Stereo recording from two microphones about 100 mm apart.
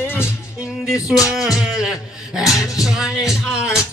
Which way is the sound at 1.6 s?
5° right (ahead or behind).